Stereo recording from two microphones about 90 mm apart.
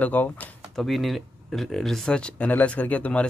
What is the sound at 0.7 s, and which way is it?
A man's voice, centre (ahead or behind).